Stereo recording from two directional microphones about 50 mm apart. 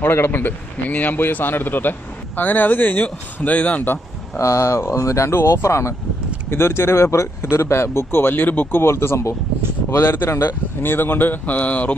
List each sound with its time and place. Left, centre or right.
0.0 s a man's voice: left
4.4 s speech: left
5.3 s speech: left
5.6 s speech: left
6.5 s speech: left
8.8 s speech: left
10.3 s a man's voice: left